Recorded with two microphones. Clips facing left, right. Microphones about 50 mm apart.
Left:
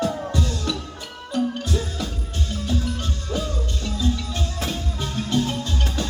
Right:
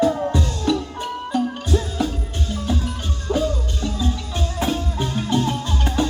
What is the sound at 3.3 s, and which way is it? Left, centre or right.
Music, centre.